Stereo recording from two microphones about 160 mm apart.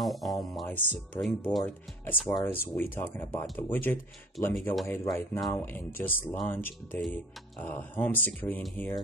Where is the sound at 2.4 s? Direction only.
15° left (ahead or behind).